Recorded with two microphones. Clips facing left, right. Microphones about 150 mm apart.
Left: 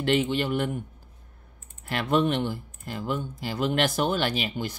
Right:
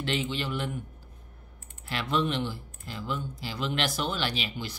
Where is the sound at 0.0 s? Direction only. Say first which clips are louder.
Left 7 dB; 55° left (ahead or behind).